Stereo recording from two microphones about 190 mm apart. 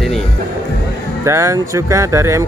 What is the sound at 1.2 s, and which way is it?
Speech, 15° right (ahead or behind).